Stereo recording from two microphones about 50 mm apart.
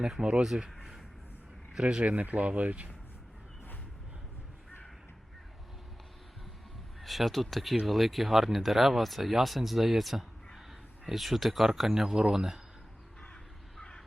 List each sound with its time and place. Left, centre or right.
0.0 s speech: centre
7.0 s speech: centre